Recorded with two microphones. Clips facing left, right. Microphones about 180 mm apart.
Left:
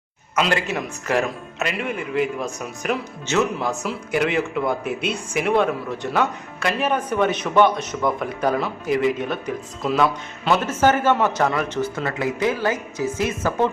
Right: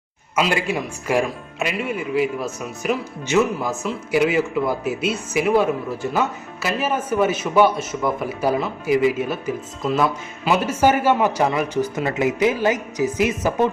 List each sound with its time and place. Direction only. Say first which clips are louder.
0.3 s a woman's voice: right 1 dB; 10° right (ahead or behind)